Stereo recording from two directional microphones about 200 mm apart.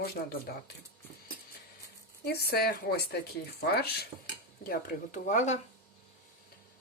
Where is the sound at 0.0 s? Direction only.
50° left (ahead or behind).